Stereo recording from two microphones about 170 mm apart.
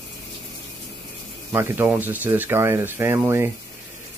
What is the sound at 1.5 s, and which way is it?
Speech, 15° right (ahead or behind).